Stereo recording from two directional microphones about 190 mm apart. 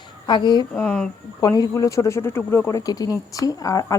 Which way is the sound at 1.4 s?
20° left (ahead or behind).